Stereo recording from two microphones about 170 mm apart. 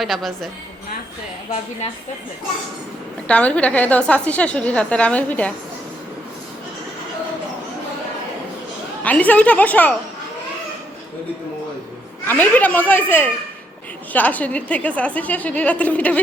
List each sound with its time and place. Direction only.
0.0 s a woman's voice: centre (ahead or behind)
3.2 s a woman's voice: 5° left (ahead or behind)
9.0 s a woman's voice: 10° left (ahead or behind)
12.2 s a woman's voice: 10° left (ahead or behind)